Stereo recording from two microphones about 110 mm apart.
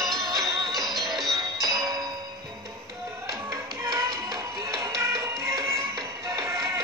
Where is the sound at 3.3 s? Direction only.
30° right (ahead or behind).